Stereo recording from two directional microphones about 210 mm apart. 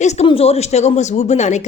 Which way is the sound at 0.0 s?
30° left (ahead or behind).